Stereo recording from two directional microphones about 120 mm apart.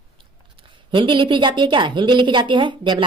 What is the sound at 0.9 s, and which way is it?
A woman's voice, 45° right (ahead or behind).